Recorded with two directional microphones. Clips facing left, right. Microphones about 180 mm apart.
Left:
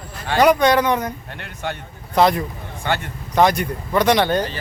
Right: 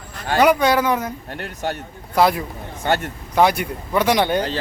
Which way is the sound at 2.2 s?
5° right (ahead or behind).